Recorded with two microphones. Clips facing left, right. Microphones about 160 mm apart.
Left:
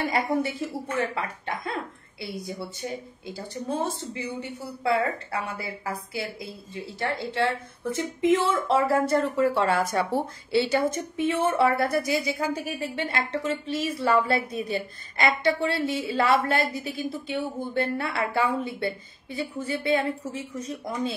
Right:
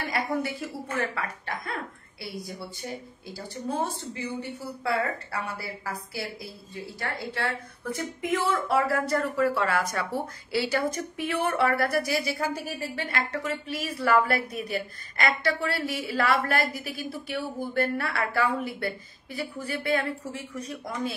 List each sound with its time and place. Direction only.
0.1 s a woman's voice: 25° left (ahead or behind)